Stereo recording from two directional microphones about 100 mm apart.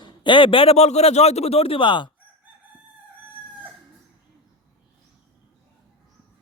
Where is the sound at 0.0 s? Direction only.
50° left (ahead or behind).